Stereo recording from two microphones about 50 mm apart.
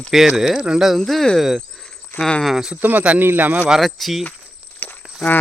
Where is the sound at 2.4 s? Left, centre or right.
Centre.